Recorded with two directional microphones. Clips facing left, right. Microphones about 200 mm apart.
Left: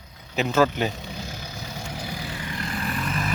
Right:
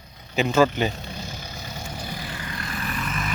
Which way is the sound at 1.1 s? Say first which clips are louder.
Even; 10° left (ahead or behind).